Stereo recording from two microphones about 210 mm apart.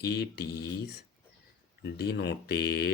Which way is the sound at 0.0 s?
50° left (ahead or behind).